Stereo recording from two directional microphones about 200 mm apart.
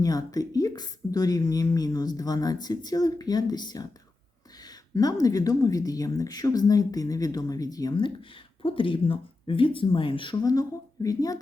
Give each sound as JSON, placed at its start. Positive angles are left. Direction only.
{"t": 0.0, "sound": "a woman's voice", "side_deg": 20}